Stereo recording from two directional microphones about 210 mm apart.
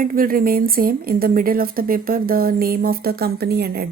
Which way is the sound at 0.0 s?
40° right (ahead or behind).